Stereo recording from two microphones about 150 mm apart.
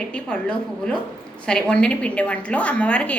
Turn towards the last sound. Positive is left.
turn(degrees=10)  # may be behind; listen again after turning